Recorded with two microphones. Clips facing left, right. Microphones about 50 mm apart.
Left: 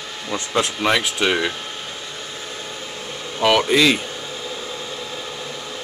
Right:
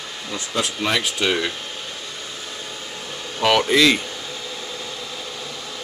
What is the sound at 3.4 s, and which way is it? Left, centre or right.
Speech, centre.